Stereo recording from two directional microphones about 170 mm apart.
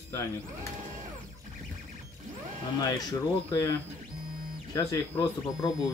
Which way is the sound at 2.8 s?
20° left (ahead or behind).